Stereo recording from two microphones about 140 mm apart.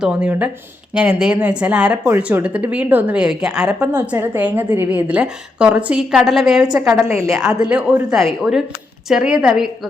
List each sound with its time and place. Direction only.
0.0 s a woman's voice: 5° right (ahead or behind)
6.9 s a woman's voice: 20° right (ahead or behind)
7.4 s speech: 5° right (ahead or behind)